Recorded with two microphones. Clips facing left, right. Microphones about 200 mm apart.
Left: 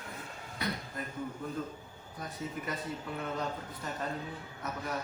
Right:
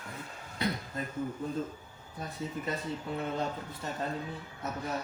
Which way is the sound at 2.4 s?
30° right (ahead or behind).